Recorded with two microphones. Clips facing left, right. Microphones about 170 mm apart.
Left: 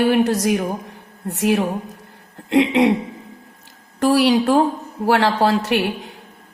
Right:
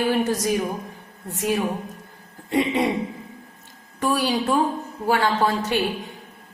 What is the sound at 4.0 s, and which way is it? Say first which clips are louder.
A woman's voice: left 7 dB; 80° left.